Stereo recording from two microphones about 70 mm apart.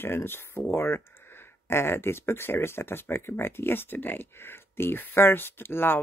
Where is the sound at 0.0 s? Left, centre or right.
Left.